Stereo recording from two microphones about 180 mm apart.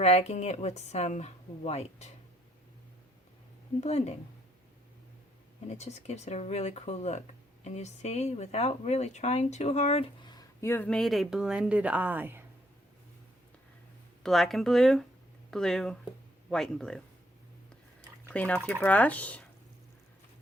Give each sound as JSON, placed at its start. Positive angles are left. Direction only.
{"t": 0.0, "sound": "speech", "side_deg": 35}
{"t": 3.8, "sound": "speech", "side_deg": 35}
{"t": 5.6, "sound": "speech", "side_deg": 40}
{"t": 14.3, "sound": "speech", "side_deg": 0}
{"t": 18.3, "sound": "speech", "side_deg": 10}